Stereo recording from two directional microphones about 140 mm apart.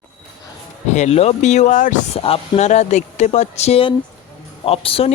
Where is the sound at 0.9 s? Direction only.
50° left (ahead or behind).